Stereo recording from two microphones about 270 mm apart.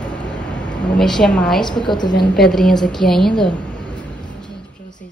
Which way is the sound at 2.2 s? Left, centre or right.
Centre.